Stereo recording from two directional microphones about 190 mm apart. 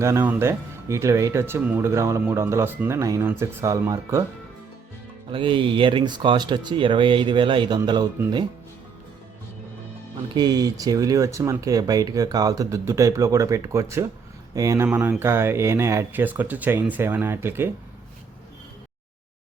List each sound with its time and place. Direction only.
0.0 s speech: 10° right (ahead or behind)
5.3 s speech: 25° right (ahead or behind)
10.3 s speech: 20° right (ahead or behind)